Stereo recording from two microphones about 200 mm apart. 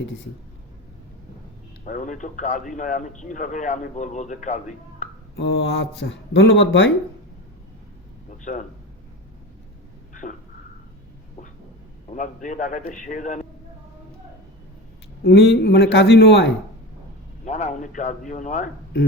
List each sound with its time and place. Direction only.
1.8 s a man's voice: 40° left (ahead or behind)
5.4 s speech: 60° left (ahead or behind)
8.3 s speech: 40° left (ahead or behind)
12.1 s a man's voice: 40° left (ahead or behind)
15.2 s speech: 55° left (ahead or behind)
17.4 s a man's voice: 35° left (ahead or behind)